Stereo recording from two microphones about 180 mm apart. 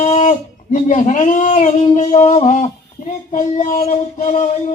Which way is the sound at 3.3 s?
40° left (ahead or behind).